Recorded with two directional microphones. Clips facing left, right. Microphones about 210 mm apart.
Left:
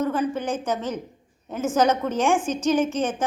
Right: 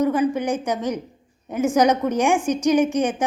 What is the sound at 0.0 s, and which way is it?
A woman's voice, 10° right (ahead or behind).